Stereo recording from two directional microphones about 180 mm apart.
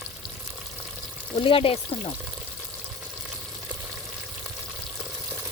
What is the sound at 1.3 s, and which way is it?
Speech, 30° left (ahead or behind).